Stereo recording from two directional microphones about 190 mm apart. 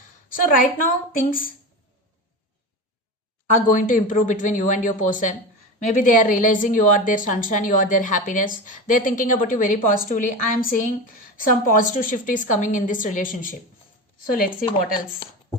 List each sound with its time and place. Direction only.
0.3 s a woman's voice: 45° left (ahead or behind)
3.7 s a woman's voice: 45° left (ahead or behind)